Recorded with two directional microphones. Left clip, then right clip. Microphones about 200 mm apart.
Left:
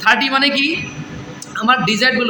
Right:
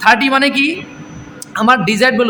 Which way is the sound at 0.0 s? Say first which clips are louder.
Right 3 dB; 55° right (ahead or behind).